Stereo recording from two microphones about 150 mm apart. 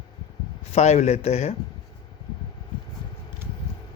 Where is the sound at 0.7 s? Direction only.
45° left (ahead or behind).